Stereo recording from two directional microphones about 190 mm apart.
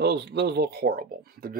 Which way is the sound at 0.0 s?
60° right (ahead or behind).